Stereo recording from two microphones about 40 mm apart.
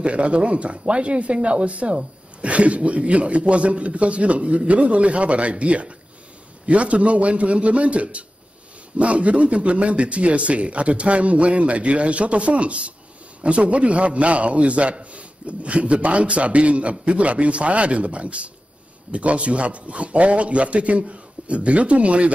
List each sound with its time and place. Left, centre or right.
0.0 s speech: right